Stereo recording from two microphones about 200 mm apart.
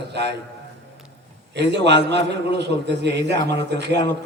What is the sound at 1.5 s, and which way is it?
A man's voice, 60° right (ahead or behind).